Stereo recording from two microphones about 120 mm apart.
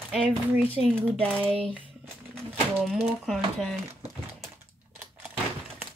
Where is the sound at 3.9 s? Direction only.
20° right (ahead or behind).